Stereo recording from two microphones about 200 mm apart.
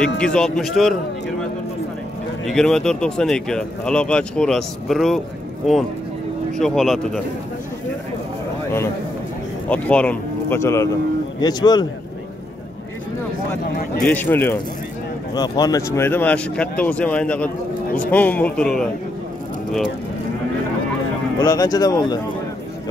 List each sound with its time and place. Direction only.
0.0 s speech: 5° left (ahead or behind)
2.4 s speech: centre (ahead or behind)
6.6 s speech: centre (ahead or behind)
9.7 s speech: 5° left (ahead or behind)
14.0 s speech: 10° left (ahead or behind)
21.4 s speech: 20° left (ahead or behind)